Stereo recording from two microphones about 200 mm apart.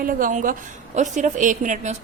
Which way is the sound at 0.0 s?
45° right (ahead or behind).